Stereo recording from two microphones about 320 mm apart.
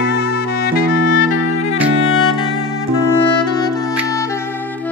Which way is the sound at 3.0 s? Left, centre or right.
Centre.